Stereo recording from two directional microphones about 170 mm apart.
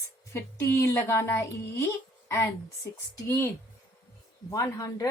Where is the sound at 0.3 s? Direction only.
15° left (ahead or behind).